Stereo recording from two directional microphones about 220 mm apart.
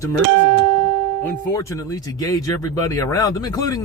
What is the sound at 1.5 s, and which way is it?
Speech, 15° left (ahead or behind).